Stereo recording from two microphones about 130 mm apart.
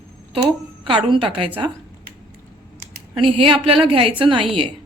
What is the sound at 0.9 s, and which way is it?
Speech, 40° right (ahead or behind).